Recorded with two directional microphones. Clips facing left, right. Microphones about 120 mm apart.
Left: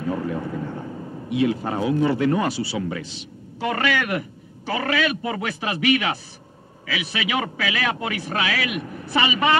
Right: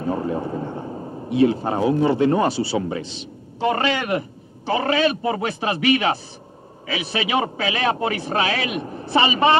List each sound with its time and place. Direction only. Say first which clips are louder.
0.0 s a man's voice: right 2 dB; 30° right (ahead or behind)